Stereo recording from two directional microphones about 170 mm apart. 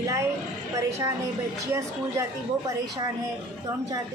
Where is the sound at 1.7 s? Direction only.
15° right (ahead or behind).